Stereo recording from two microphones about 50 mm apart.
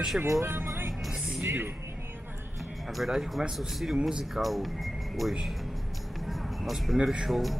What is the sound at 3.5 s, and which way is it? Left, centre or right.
Speech, centre.